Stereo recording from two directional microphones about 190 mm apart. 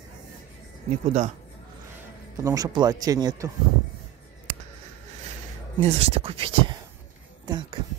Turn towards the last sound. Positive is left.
turn(degrees=-20)  # may be behind; listen again after turning